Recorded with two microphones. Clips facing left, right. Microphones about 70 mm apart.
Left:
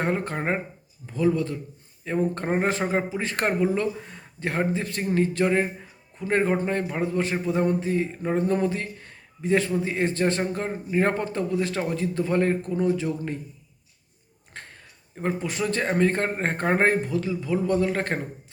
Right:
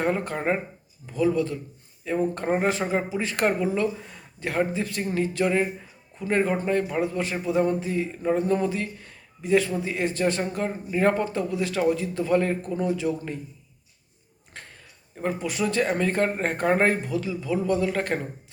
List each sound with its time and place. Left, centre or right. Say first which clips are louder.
0.0 s speech: right 1 dB; left
14.5 s a sound: left 2 dB; left
15.1 s speech: even; left